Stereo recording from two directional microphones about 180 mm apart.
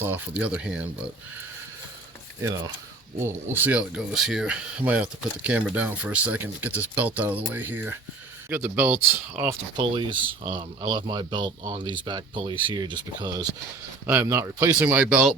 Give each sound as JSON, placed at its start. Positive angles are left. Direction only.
{"t": 0.0, "sound": "speech", "side_deg": -10}
{"t": 3.2, "sound": "speech", "side_deg": -10}
{"t": 9.7, "sound": "speech", "side_deg": -25}